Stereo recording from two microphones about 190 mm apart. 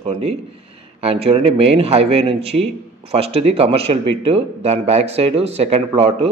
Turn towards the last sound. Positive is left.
turn(degrees=-30)  # may be behind; listen again after turning